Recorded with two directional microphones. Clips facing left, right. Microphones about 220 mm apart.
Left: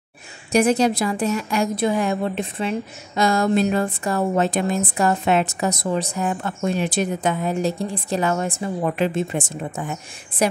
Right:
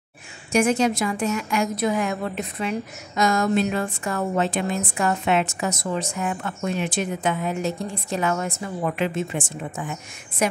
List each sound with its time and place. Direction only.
0.5 s a woman's voice: 35° left (ahead or behind)